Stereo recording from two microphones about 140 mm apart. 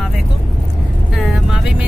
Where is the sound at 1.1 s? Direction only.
Centre (ahead or behind).